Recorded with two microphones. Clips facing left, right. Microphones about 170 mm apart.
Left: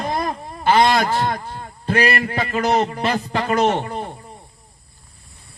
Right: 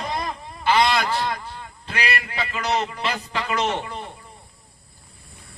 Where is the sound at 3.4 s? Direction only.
45° left (ahead or behind).